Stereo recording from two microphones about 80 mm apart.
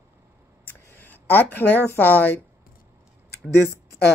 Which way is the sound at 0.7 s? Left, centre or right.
Left.